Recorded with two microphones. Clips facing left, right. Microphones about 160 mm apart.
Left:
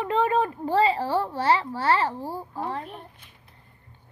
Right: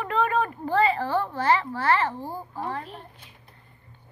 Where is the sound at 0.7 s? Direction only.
30° left (ahead or behind).